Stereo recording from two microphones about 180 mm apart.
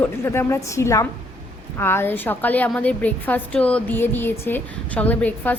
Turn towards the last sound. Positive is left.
turn(degrees=10)  # may be behind; listen again after turning